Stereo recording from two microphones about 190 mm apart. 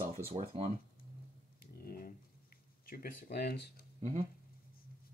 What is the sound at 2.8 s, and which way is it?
Speech, 50° left (ahead or behind).